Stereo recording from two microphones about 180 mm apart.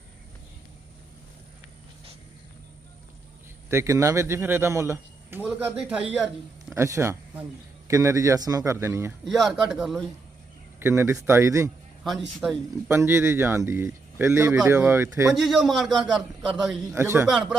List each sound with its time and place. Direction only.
3.7 s speech: 15° right (ahead or behind)
9.2 s speech: centre (ahead or behind)
10.8 s speech: 15° right (ahead or behind)
12.4 s speech: 5° right (ahead or behind)
15.4 s speech: centre (ahead or behind)
17.2 s speech: centre (ahead or behind)